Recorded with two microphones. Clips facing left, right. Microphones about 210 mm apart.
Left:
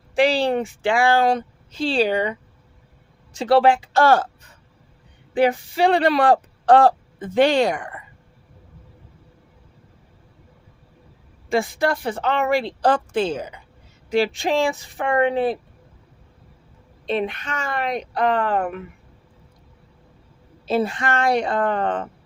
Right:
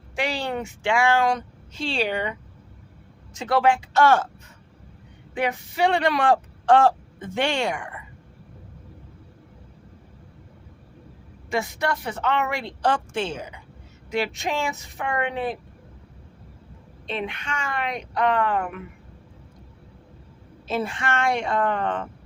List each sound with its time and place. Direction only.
0.2 s speech: 30° left (ahead or behind)
3.3 s speech: 30° left (ahead or behind)
5.3 s speech: 35° left (ahead or behind)
11.5 s speech: 30° left (ahead or behind)
17.1 s speech: 40° left (ahead or behind)
20.7 s speech: 35° left (ahead or behind)